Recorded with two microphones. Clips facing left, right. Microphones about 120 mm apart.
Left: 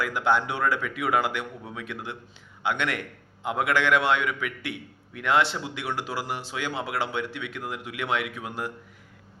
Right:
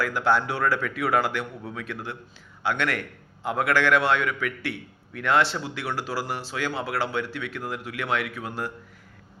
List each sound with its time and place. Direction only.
0.0 s a man's voice: 20° left (ahead or behind)